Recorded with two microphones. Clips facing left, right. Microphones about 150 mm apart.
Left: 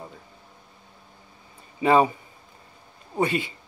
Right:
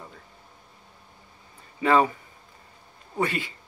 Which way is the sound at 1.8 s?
20° left (ahead or behind).